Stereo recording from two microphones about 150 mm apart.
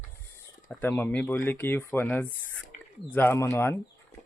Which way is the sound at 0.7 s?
10° left (ahead or behind).